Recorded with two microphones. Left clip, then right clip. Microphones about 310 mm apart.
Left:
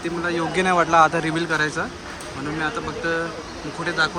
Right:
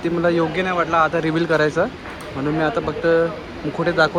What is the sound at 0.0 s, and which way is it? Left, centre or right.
Speech, centre.